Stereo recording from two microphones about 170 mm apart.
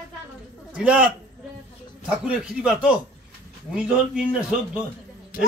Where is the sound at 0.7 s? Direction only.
5° right (ahead or behind).